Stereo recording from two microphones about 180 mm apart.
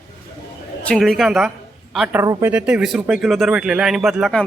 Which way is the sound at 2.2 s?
20° right (ahead or behind).